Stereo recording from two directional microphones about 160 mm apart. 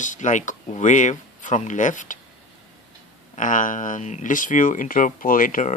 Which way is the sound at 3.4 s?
55° left (ahead or behind).